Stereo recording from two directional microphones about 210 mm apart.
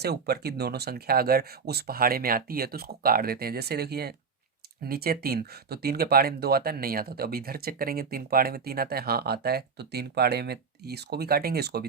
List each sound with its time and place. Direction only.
0.0 s speech: 50° right (ahead or behind)